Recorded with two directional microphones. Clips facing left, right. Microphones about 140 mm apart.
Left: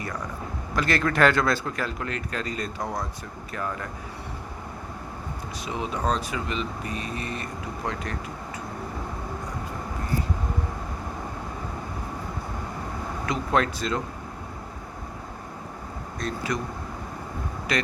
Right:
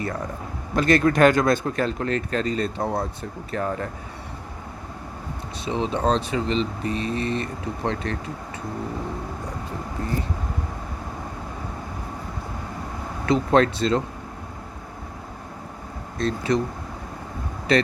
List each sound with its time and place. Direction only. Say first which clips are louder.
0.8 s speech: right 5 dB; 25° right (ahead or behind)
3.5 s speech: right 5 dB; 40° right (ahead or behind)
5.6 s speech: right 5 dB; 25° right (ahead or behind)
13.2 s speech: right 7 dB; 30° right (ahead or behind)
16.1 s speech: right 7 dB; 25° right (ahead or behind)
17.7 s speech: right 8 dB; 30° right (ahead or behind)